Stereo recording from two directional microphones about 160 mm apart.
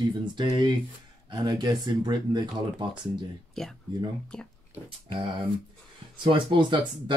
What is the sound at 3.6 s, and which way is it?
Speech, 5° left (ahead or behind).